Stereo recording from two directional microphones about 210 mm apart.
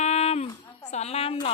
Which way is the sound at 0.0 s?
30° left (ahead or behind).